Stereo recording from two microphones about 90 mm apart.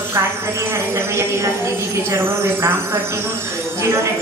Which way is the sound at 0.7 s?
30° right (ahead or behind).